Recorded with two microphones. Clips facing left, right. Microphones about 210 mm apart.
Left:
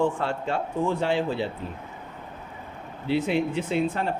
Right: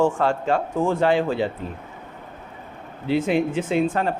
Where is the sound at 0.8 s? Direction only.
50° right (ahead or behind).